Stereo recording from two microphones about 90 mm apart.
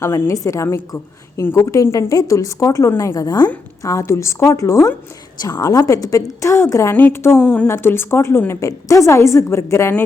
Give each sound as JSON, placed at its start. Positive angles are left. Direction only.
{"t": 0.0, "sound": "a woman's voice", "side_deg": 35}
{"t": 3.8, "sound": "a woman's voice", "side_deg": 35}
{"t": 7.3, "sound": "a woman's voice", "side_deg": 15}
{"t": 7.7, "sound": "a woman's voice", "side_deg": 25}